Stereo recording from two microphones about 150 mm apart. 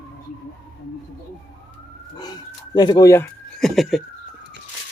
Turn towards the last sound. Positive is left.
turn(degrees=0)  # may be behind; listen again after turning